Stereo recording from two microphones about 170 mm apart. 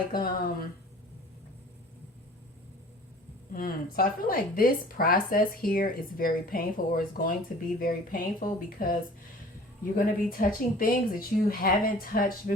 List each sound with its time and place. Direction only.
0.1 s speech: 60° left (ahead or behind)
3.5 s speech: 55° left (ahead or behind)